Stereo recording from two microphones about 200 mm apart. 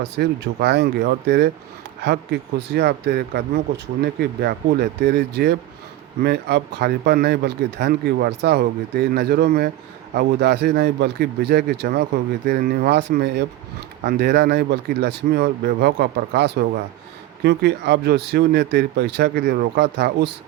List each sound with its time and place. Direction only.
0.2 s speech: 55° right (ahead or behind)